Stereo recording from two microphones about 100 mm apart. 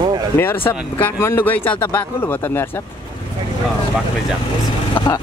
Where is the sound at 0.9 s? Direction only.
20° left (ahead or behind).